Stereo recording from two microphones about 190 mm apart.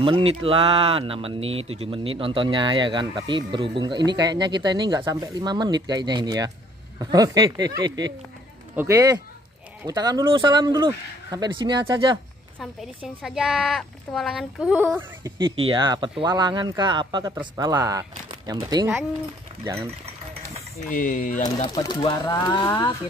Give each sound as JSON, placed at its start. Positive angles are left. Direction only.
{"t": 0.0, "sound": "speech", "side_deg": -30}
{"t": 13.0, "sound": "speech", "side_deg": -5}
{"t": 15.3, "sound": "speech", "side_deg": -25}
{"t": 20.9, "sound": "speech", "side_deg": 45}
{"t": 21.5, "sound": "speech", "side_deg": 20}